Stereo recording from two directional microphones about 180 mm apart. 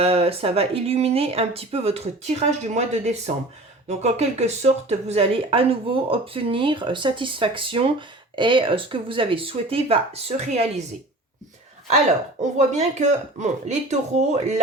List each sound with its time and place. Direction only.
0.0 s speech: 35° right (ahead or behind)
11.9 s speech: 40° right (ahead or behind)